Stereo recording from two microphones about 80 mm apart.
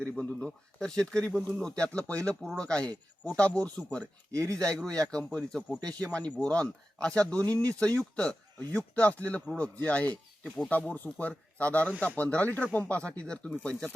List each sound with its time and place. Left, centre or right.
0.0 s speech: centre
2.4 s speech: centre